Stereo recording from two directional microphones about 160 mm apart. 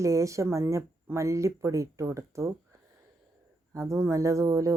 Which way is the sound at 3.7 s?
20° right (ahead or behind).